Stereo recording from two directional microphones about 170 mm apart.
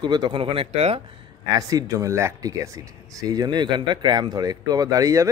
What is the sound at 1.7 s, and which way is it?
Speech, 20° right (ahead or behind).